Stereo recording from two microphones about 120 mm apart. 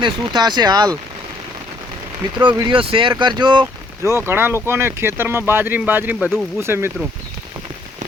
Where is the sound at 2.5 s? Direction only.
45° right (ahead or behind).